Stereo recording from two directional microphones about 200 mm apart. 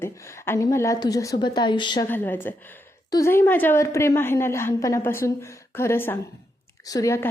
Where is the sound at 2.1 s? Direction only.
10° left (ahead or behind).